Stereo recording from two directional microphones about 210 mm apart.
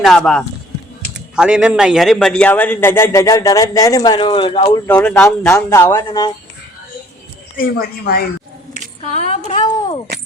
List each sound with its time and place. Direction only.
0.0 s a man's voice: 5° left (ahead or behind); by 4.8 s 25° left (ahead or behind)
4.9 s a man's voice: 5° left (ahead or behind)
7.5 s speech: 45° left (ahead or behind)
9.0 s a woman's voice: 30° left (ahead or behind)